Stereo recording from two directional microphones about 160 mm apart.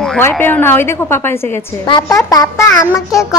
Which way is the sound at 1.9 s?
25° left (ahead or behind).